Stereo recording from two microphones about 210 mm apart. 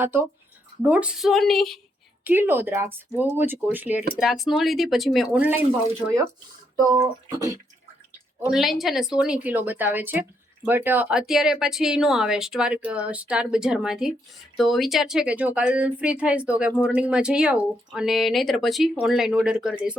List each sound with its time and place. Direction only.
0.0 s speech: 10° right (ahead or behind)
2.2 s speech: 10° right (ahead or behind)
6.9 s speech: 15° right (ahead or behind)
8.4 s speech: 5° right (ahead or behind)